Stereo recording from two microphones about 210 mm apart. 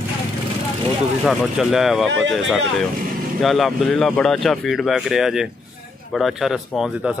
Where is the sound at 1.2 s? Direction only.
Centre (ahead or behind).